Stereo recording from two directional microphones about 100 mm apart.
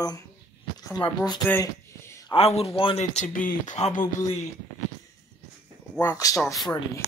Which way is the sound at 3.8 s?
90° left.